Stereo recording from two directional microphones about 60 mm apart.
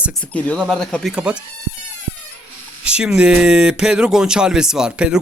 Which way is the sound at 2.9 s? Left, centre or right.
Centre.